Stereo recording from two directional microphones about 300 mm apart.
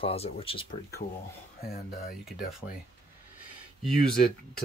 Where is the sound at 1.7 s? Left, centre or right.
Left.